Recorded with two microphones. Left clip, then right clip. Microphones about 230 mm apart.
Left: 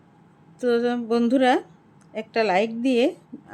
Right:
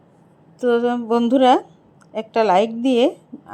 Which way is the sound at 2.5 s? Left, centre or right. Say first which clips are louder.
Right 5 dB; centre.